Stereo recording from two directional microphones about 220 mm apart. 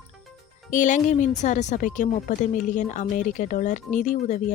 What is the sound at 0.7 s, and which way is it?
Speech, 35° left (ahead or behind).